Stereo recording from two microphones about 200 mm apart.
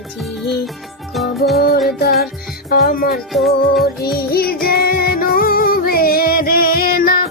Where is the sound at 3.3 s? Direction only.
Centre (ahead or behind).